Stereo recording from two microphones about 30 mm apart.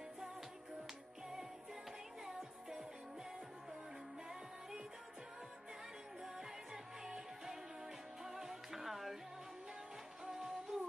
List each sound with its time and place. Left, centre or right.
6.2 s music: centre
10.3 s music: centre